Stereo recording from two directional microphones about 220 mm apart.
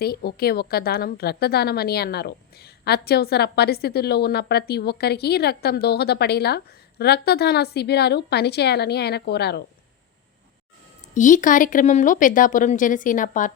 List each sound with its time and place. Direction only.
0.0 s a woman's voice: 45° left (ahead or behind)
11.1 s speech: 35° left (ahead or behind)